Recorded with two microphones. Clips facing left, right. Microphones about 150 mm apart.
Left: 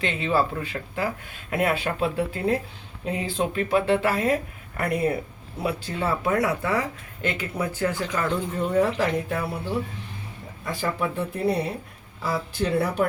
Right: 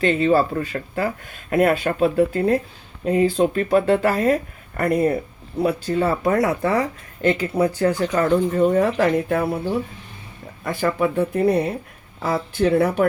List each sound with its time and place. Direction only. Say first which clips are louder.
0.0 s speech: right 7 dB; 45° right (ahead or behind)
10.6 s speech: right 6 dB; 55° right (ahead or behind)